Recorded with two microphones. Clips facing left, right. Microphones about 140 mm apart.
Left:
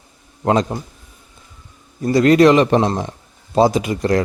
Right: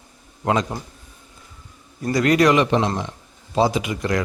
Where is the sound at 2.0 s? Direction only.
25° left (ahead or behind).